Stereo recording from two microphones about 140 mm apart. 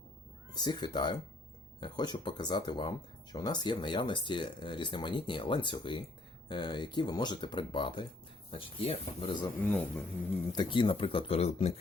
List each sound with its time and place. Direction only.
0.5 s speech: 30° left (ahead or behind)
9.6 s speech: 10° left (ahead or behind)
10.5 s speech: 35° left (ahead or behind)